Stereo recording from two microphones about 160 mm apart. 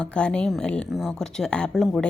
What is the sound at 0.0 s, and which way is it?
A woman's voice, 5° left (ahead or behind).